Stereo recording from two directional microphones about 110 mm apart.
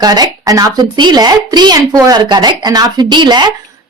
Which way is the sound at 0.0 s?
35° right (ahead or behind).